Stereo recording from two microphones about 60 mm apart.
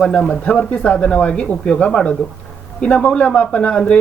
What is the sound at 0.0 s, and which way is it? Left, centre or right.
Speech, centre.